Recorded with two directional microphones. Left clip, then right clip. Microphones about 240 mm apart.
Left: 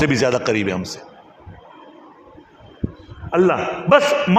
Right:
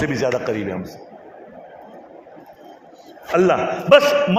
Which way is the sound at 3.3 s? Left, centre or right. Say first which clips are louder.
Right 1 dB; left.